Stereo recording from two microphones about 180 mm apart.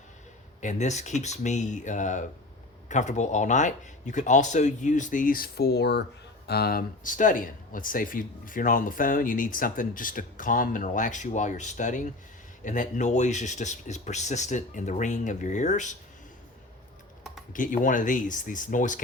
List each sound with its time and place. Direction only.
0.6 s speech: 40° left (ahead or behind)
17.5 s speech: 45° left (ahead or behind)